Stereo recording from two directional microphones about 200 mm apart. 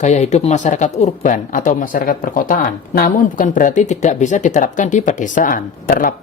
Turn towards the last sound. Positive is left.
turn(degrees=45)  # may be behind; listen again after turning